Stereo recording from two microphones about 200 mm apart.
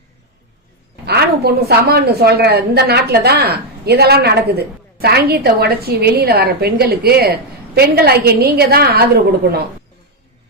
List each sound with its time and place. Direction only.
1.0 s a woman's voice: 55° right (ahead or behind)